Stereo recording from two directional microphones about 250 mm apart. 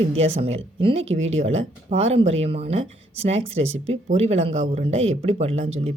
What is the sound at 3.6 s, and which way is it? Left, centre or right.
Speech, right.